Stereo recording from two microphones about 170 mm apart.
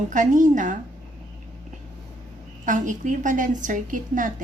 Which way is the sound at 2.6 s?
50° right (ahead or behind).